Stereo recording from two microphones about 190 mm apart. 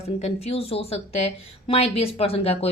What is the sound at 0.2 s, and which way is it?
Speech, 35° left (ahead or behind).